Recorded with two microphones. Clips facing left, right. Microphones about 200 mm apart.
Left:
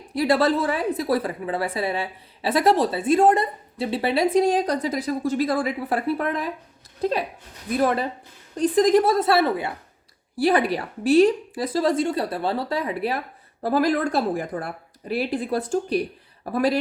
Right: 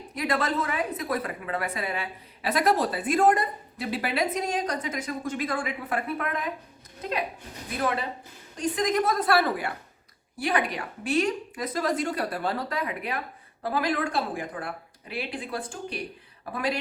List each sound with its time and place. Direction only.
0.1 s a woman's voice: 30° left (ahead or behind)
8.5 s a woman's voice: 35° left (ahead or behind)